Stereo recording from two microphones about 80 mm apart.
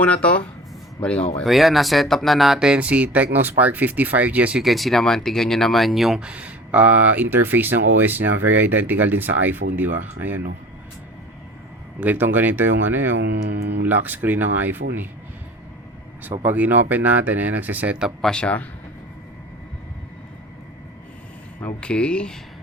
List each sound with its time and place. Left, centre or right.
0.0 s speech: centre
1.5 s speech: centre
4.6 s speech: centre; by 10.4 s right
11.9 s speech: right
16.3 s speech: right
18.2 s speech: centre
21.8 s speech: centre